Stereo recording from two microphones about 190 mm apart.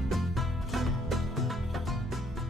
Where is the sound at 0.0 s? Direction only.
Centre (ahead or behind).